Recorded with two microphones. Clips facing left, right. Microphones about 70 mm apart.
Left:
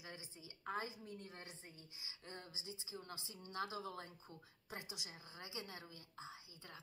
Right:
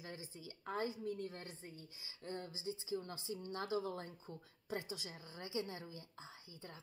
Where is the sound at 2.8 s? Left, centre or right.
Left.